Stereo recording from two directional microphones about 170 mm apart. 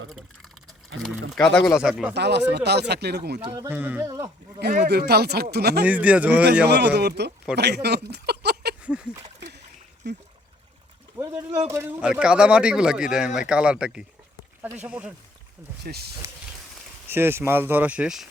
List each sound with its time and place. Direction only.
0.9 s speech: 90° right
1.3 s speech: 5° left (ahead or behind)
2.1 s speech: 85° right
3.4 s speech: 25° right (ahead or behind)
3.7 s speech: 10° right (ahead or behind)
4.7 s speech: 70° right (ahead or behind)
5.8 s speech: 10° right (ahead or behind)
6.7 s speech: 75° right (ahead or behind)
8.8 s speech: 5° right (ahead or behind)
11.2 s a sound: 20° right (ahead or behind)
11.7 s speech: 15° right (ahead or behind)
15.9 s speech: 70° right (ahead or behind)
17.1 s speech: 15° right (ahead or behind)